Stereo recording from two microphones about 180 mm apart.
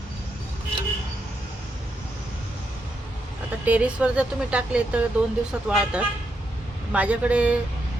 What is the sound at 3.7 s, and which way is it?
A woman's voice, 5° right (ahead or behind).